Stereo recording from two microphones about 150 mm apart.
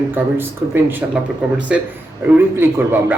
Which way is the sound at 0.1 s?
15° right (ahead or behind).